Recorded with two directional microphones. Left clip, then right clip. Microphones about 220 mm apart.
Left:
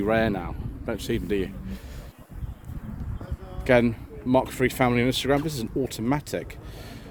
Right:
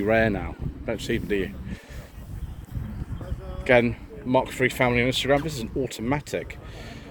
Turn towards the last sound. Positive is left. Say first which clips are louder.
# even
turn(degrees=30)  # may be behind; listen again after turning